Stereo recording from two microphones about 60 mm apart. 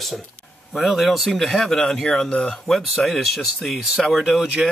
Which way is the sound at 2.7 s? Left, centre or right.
Centre.